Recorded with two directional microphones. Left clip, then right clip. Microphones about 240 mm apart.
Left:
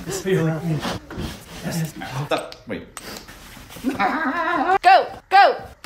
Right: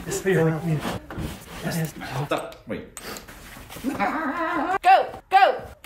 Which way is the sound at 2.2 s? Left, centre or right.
Centre.